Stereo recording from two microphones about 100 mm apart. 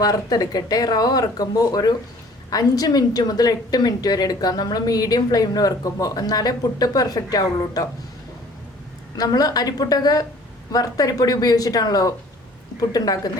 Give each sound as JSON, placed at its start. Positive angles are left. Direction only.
{"t": 0.0, "sound": "a woman's voice", "side_deg": 40}
{"t": 9.1, "sound": "a woman's voice", "side_deg": 40}